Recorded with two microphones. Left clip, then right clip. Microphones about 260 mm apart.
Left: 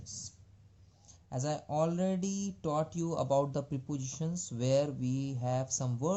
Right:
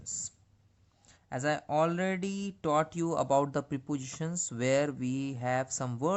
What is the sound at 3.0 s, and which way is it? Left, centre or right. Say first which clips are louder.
Speech: right 3 dB; right.